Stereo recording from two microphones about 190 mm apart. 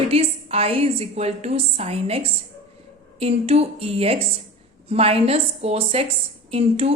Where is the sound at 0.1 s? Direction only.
30° right (ahead or behind).